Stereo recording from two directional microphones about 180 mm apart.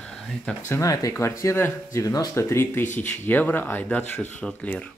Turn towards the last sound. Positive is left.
turn(degrees=5)  # may be behind; listen again after turning